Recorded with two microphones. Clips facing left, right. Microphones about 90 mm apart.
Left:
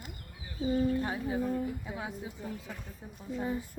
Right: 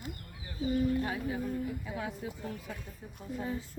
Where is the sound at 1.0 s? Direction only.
25° left (ahead or behind).